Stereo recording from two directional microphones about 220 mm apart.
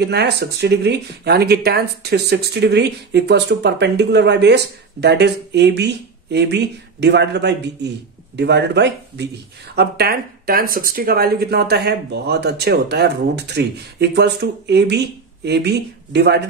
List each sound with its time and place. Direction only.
0.0 s speech: 50° right (ahead or behind)